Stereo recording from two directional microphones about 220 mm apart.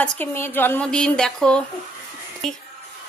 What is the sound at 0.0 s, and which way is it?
A woman's voice, 10° left (ahead or behind).